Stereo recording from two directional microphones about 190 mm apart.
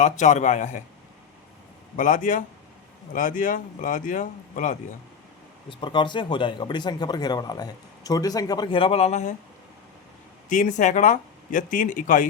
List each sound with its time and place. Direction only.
0.0 s a man's voice: 40° left (ahead or behind)
2.0 s speech: 40° left (ahead or behind)
5.6 s speech: 25° left (ahead or behind)
10.5 s speech: 40° left (ahead or behind)